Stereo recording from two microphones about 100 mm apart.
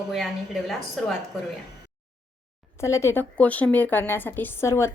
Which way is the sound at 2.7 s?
30° left (ahead or behind).